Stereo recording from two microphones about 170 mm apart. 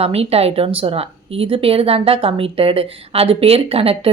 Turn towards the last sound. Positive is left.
turn(degrees=-35)  # may be behind; listen again after turning